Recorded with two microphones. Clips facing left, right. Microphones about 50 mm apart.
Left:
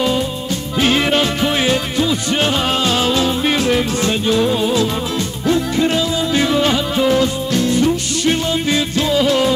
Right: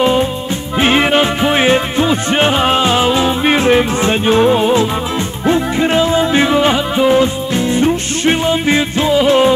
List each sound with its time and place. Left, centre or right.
0.7 s music: right